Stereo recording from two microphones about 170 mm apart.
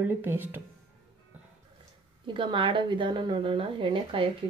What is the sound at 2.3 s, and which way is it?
Speech, 30° right (ahead or behind).